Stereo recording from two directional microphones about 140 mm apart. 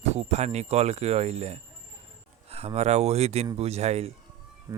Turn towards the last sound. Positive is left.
turn(degrees=-25)  # may be behind; listen again after turning